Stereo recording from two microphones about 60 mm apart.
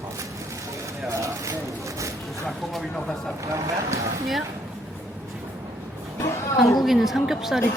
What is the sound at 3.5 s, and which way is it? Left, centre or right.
Speech, right.